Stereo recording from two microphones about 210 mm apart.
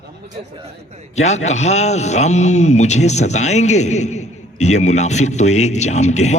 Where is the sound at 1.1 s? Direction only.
30° left (ahead or behind).